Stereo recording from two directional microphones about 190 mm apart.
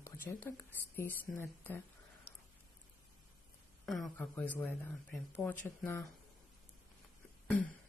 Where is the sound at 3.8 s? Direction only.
Centre (ahead or behind).